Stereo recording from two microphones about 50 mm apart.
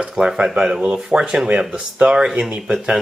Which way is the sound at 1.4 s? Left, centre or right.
Right.